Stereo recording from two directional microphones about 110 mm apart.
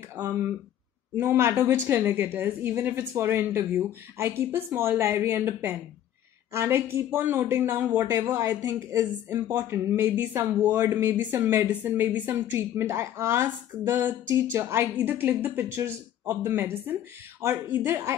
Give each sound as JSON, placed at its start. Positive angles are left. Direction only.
{"t": 1.1, "sound": "speech", "side_deg": -20}